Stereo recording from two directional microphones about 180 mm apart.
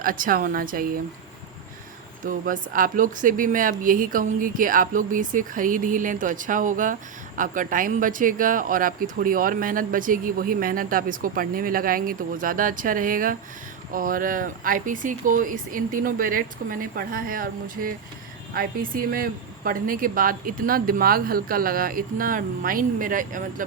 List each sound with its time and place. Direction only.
0.0 s speech: 50° right (ahead or behind)
2.2 s speech: 50° right (ahead or behind)